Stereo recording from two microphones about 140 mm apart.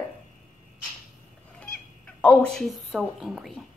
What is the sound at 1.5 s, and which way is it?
Speech, 10° left (ahead or behind).